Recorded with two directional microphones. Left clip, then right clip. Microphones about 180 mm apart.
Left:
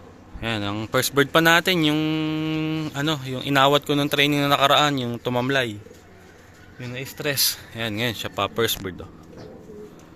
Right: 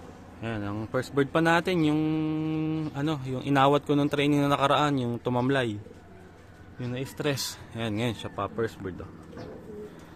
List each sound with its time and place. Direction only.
0.4 s speech: 20° left (ahead or behind); by 5.7 s 10° right (ahead or behind)
6.7 s speech: 25° right (ahead or behind); by 8.3 s 5° right (ahead or behind)
8.9 s speech: 20° left (ahead or behind)